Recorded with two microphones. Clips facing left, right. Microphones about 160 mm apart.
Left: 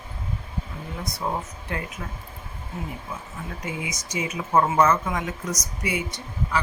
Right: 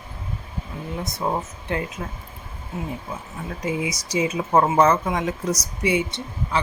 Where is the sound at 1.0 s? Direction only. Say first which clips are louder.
Right 3 dB; 25° right (ahead or behind).